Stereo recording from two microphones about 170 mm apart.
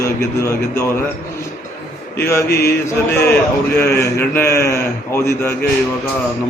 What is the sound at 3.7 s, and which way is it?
A man's voice, 15° left (ahead or behind).